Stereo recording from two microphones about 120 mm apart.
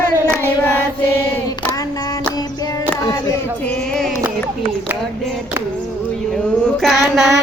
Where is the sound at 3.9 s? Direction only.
5° left (ahead or behind).